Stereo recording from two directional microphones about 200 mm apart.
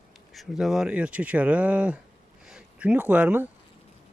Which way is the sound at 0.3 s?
Centre (ahead or behind).